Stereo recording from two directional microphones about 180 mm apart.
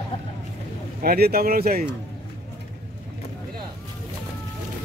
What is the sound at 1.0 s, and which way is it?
Speech, 55° right (ahead or behind).